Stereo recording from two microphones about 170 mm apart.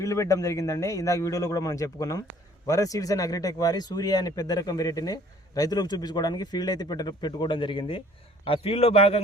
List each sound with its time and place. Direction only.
0.0 s speech: 20° left (ahead or behind); by 9.2 s 35° left (ahead or behind)